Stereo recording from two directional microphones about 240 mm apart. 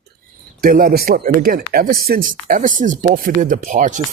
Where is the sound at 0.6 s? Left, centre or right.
Right.